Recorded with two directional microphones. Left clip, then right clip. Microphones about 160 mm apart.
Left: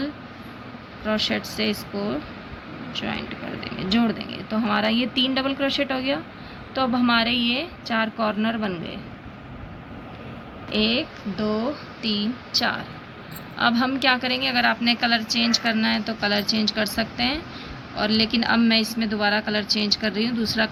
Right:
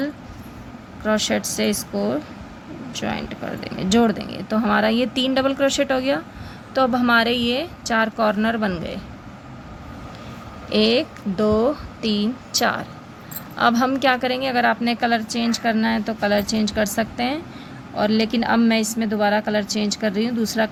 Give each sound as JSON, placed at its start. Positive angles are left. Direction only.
{"t": 1.0, "sound": "a woman's voice", "side_deg": -85}
{"t": 10.7, "sound": "speech", "side_deg": -90}
{"t": 13.6, "sound": "a woman's voice", "side_deg": -75}